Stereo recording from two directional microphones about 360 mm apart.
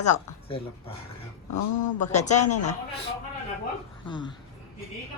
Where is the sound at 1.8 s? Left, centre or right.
Centre.